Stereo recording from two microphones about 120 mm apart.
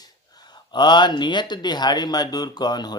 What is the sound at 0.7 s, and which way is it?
Speech, 40° left (ahead or behind).